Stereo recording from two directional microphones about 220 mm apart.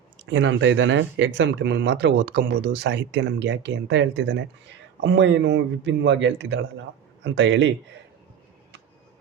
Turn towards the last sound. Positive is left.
turn(degrees=-55)  # may be behind; listen again after turning